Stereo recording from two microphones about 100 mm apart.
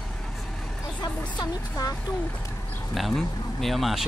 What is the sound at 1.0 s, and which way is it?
Speech, 40° left (ahead or behind).